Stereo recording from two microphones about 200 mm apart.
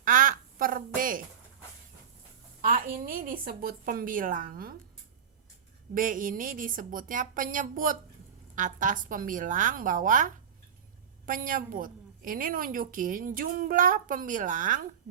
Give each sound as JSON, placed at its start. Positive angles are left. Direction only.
{"t": 0.0, "sound": "quack", "side_deg": -40}
{"t": 2.6, "sound": "a woman's voice", "side_deg": -45}
{"t": 5.9, "sound": "a woman's voice", "side_deg": -40}